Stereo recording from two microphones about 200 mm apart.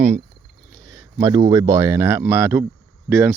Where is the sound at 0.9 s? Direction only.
20° right (ahead or behind).